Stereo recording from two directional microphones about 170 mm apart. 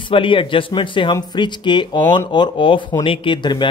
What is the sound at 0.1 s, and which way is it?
Speech, 30° left (ahead or behind).